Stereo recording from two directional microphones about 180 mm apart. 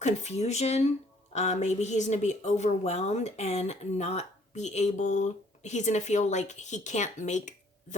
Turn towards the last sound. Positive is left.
turn(degrees=40)  # may be behind; listen again after turning